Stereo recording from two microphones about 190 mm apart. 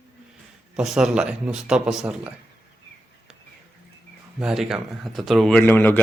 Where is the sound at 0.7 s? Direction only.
Centre (ahead or behind).